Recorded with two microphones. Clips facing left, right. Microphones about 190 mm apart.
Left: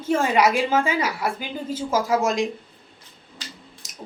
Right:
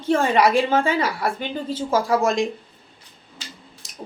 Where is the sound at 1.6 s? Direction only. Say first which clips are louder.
Right 2 dB; 30° right (ahead or behind).